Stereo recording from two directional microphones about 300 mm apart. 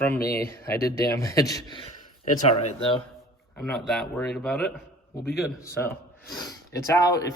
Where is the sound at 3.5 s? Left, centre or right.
Centre.